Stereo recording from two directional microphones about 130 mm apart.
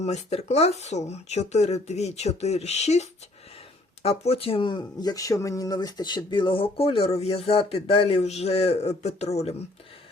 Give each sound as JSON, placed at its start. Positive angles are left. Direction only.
{"t": 0.0, "sound": "speech", "side_deg": 55}